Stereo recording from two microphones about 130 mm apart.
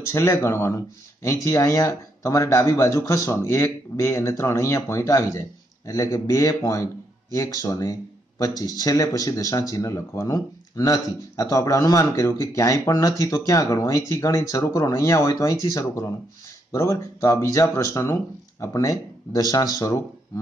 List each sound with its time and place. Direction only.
0.1 s speech: 20° left (ahead or behind)
16.7 s speech: 25° left (ahead or behind)